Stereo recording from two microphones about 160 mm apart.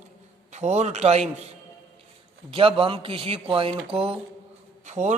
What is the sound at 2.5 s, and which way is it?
A man's voice, 35° right (ahead or behind).